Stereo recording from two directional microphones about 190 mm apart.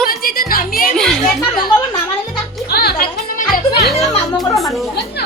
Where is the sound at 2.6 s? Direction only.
55° left (ahead or behind).